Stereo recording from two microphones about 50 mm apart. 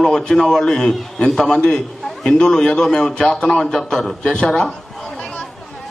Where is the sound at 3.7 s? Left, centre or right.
Centre.